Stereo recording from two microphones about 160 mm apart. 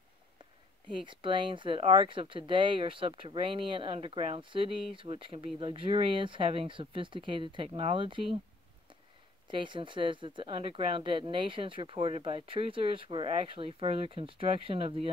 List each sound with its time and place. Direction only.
0.9 s speech: 30° right (ahead or behind)
9.5 s speech: 30° right (ahead or behind)